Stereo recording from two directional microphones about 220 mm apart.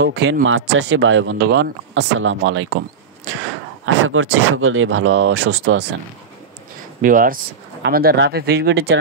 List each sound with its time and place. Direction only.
0.0 s speech: 50° right (ahead or behind)
3.8 s speech: 65° right (ahead or behind)
7.0 s speech: 40° right (ahead or behind)